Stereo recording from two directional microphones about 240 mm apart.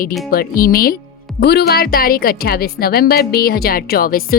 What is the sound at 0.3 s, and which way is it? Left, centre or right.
Speech, left.